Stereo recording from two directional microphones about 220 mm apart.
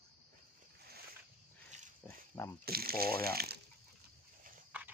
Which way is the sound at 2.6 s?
45° right (ahead or behind).